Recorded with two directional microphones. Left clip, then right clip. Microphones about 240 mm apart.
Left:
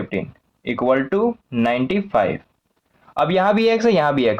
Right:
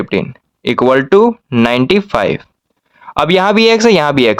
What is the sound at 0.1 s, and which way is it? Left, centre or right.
Speech, right.